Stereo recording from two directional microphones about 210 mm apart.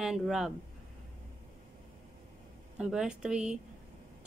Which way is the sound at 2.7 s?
5° right (ahead or behind).